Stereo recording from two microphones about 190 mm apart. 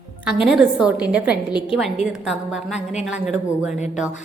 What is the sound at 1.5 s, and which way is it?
Speech, 25° left (ahead or behind).